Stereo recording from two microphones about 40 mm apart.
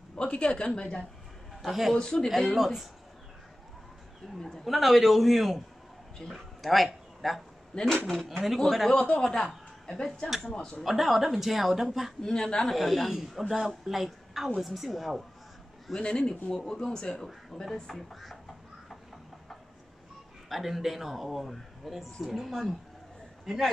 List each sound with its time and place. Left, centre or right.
0.1 s a woman's voice: left
1.6 s speech: centre
2.0 s a woman's voice: centre
2.5 s speech: centre
4.4 s a man's voice: centre
7.7 s a woman's voice: left
8.3 s a man's voice: centre
10.4 s a woman's voice: left
10.8 s speech: centre
12.2 s a woman's voice: centre
12.6 s speech: centre
16.0 s a woman's voice: left
20.4 s speech: centre